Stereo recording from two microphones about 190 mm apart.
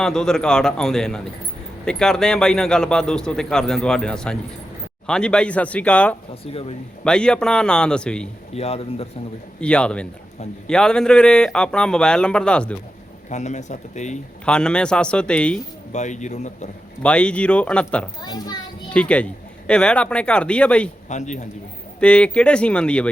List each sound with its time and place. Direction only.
0.0 s a man's voice: 5° left (ahead or behind)
6.4 s speech: 30° left (ahead or behind)
7.0 s a man's voice: 5° left (ahead or behind)
8.5 s speech: 30° left (ahead or behind)
9.6 s a man's voice: 5° left (ahead or behind)
13.3 s speech: 40° left (ahead or behind)
14.4 s a man's voice: 5° left (ahead or behind)
15.9 s speech: 40° left (ahead or behind)
17.0 s a man's voice: 5° left (ahead or behind)
18.2 s a child's voice: 20° left (ahead or behind)
18.9 s a man's voice: 5° left (ahead or behind)
21.1 s speech: 40° left (ahead or behind)
22.0 s a man's voice: 5° left (ahead or behind)